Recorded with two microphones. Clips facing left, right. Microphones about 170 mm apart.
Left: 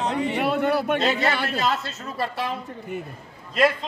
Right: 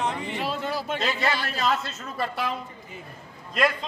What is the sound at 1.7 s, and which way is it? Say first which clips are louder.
Speech: left 1 dB; 35° left (ahead or behind).